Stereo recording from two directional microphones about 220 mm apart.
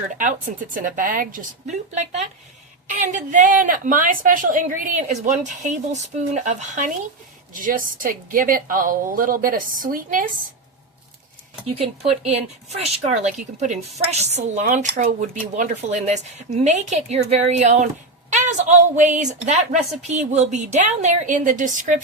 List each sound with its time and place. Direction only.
0.1 s speech: 35° right (ahead or behind)
11.6 s speech: 25° right (ahead or behind)